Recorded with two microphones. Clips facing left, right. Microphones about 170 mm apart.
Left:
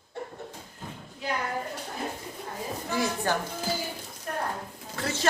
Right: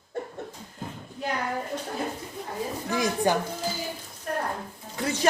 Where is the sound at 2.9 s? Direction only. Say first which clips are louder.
Right 4 dB; 15° right (ahead or behind).